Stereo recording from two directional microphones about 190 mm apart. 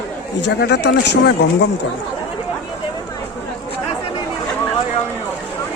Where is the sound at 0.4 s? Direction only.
60° left (ahead or behind).